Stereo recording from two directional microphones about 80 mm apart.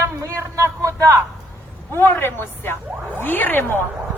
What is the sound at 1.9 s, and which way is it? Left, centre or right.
A man's voice, left.